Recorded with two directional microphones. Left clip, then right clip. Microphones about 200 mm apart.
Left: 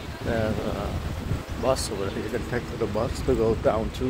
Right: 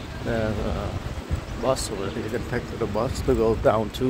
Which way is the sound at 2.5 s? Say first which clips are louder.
Right 1 dB; 5° right (ahead or behind).